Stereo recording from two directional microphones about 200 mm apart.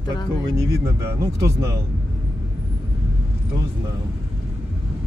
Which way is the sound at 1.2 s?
15° right (ahead or behind).